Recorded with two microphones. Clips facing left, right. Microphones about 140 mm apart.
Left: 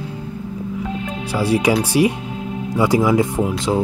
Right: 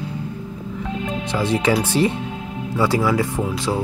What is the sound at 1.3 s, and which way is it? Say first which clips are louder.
Speech: left 3 dB; 10° left (ahead or behind).